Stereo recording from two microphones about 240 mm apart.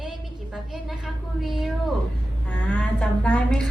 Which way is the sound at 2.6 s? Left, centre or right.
Centre.